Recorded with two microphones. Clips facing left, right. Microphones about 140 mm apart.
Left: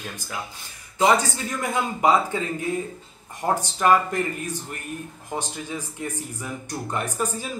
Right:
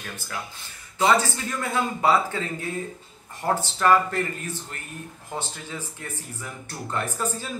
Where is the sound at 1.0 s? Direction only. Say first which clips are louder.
Left 1 dB; 15° left (ahead or behind).